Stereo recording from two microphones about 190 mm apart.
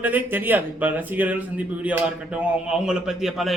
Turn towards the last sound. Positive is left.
turn(degrees=0)  # may be behind; listen again after turning